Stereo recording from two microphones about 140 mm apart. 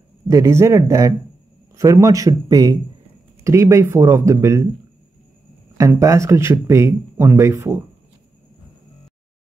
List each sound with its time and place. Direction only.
0.3 s speech: 20° right (ahead or behind)
5.8 s speech: 20° right (ahead or behind)